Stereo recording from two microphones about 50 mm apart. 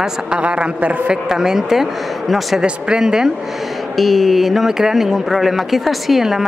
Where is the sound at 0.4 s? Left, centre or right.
Right.